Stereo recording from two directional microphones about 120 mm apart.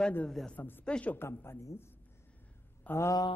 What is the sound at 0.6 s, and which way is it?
A woman's voice, 15° left (ahead or behind).